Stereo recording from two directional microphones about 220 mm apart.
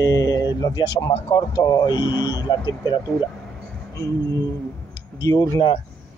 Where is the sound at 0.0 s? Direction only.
15° left (ahead or behind).